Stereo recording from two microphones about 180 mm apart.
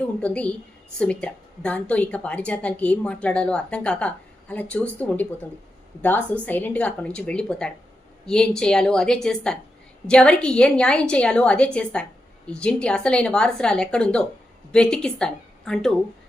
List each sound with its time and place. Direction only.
0.0 s a woman's voice: 5° left (ahead or behind)